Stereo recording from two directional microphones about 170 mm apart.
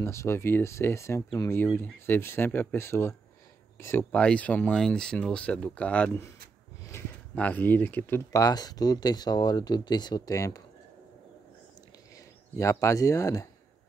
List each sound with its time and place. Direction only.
0.0 s speech: 15° left (ahead or behind)
12.5 s speech: 20° left (ahead or behind)